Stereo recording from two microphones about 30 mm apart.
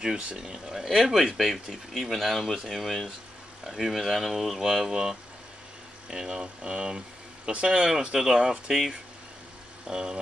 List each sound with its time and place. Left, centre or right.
0.0 s speech: right
0.7 s speech: centre
1.3 s speech: centre
4.8 s speech: centre
6.1 s speech: centre
8.1 s speech: centre
9.8 s speech: right